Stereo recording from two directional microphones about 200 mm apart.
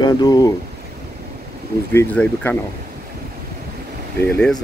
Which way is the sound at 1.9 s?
10° left (ahead or behind).